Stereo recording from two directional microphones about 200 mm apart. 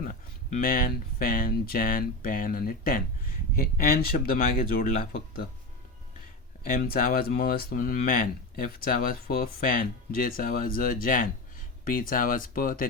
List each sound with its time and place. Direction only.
0.0 s speech: 40° left (ahead or behind)
6.7 s speech: 45° left (ahead or behind)